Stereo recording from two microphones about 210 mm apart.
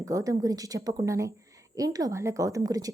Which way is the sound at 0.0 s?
15° right (ahead or behind).